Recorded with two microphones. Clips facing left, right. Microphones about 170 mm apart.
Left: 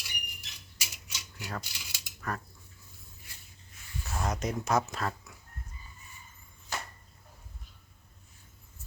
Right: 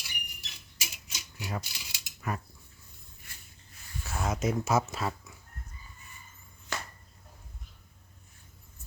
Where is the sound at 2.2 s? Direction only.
10° right (ahead or behind).